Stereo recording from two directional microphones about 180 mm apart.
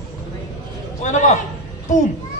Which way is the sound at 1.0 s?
45° left (ahead or behind).